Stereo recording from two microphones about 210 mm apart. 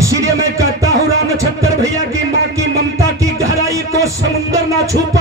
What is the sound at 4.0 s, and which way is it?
Music, 15° right (ahead or behind).